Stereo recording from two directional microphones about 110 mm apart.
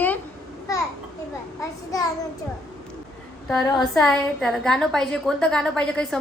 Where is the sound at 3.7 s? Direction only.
5° left (ahead or behind).